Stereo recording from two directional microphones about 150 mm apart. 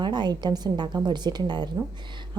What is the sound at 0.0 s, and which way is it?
A woman's voice, 30° right (ahead or behind).